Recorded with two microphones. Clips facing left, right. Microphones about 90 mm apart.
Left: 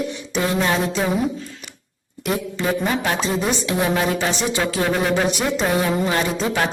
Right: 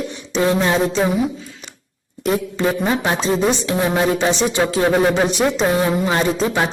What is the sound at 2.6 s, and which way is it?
Speech, 25° right (ahead or behind).